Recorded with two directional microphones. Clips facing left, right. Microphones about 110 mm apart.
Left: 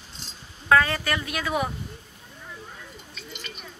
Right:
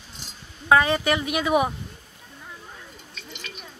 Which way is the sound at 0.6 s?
20° right (ahead or behind).